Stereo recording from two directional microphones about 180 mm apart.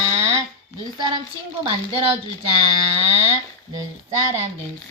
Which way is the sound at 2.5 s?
35° right (ahead or behind).